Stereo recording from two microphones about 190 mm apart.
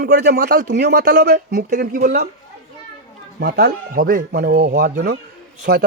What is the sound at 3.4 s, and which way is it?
A man's voice, 55° right (ahead or behind).